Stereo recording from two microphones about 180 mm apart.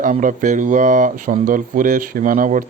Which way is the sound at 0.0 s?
45° right (ahead or behind).